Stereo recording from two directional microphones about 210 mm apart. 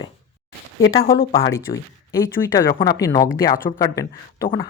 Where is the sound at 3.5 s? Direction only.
40° left (ahead or behind).